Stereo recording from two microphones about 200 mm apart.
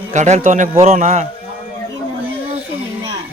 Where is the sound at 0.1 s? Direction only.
35° right (ahead or behind).